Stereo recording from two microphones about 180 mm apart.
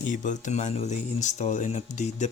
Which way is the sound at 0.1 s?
45° left (ahead or behind).